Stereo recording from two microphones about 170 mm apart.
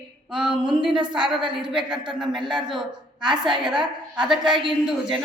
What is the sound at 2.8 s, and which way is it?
Speech, 25° right (ahead or behind).